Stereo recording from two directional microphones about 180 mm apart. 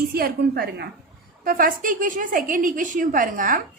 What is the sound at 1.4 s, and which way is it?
A woman's voice, 50° right (ahead or behind).